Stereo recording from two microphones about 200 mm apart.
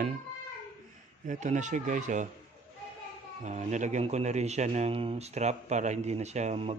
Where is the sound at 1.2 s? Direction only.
35° right (ahead or behind).